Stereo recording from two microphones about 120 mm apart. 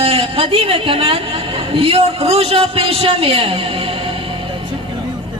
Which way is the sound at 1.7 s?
55° right (ahead or behind).